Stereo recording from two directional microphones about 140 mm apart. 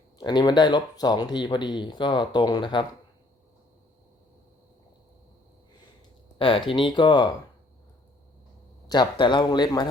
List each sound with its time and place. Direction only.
0.2 s speech: 30° left (ahead or behind)
6.4 s speech: 40° left (ahead or behind)
8.9 s speech: 35° left (ahead or behind)